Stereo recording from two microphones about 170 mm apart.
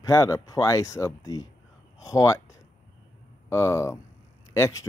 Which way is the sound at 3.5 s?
15° left (ahead or behind).